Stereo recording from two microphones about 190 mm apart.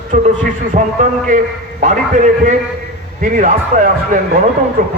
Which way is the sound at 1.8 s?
40° right (ahead or behind).